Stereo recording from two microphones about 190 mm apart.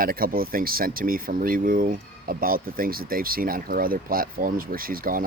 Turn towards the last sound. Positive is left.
turn(degrees=-50)  # may be behind; listen again after turning